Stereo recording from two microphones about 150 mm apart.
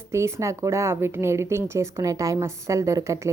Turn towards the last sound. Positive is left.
turn(degrees=-20)  # may be behind; listen again after turning